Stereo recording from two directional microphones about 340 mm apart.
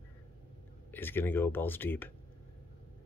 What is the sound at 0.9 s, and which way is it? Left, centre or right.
Speech, centre.